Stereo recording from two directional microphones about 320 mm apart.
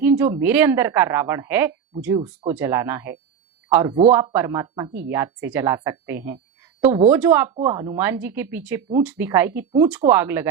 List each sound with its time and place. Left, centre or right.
0.0 s speech: centre
6.8 s speech: centre
7.1 s speech: centre